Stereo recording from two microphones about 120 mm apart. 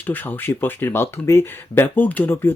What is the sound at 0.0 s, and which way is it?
Speech, 15° left (ahead or behind).